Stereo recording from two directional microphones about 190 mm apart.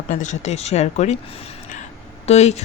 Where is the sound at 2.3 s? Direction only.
35° left (ahead or behind).